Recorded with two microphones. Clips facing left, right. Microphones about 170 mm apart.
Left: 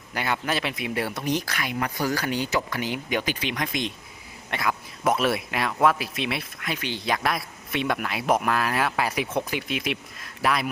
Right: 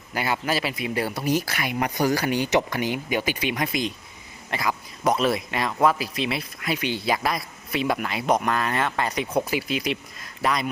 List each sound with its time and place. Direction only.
0.1 s speech: 5° right (ahead or behind)
6.7 s speech: 10° right (ahead or behind)